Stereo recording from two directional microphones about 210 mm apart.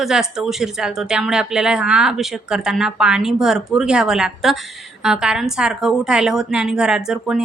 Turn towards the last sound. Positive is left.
turn(degrees=-5)  # may be behind; listen again after turning